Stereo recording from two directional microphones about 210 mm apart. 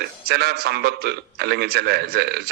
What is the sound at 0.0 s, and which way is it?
A man's voice, 50° right (ahead or behind).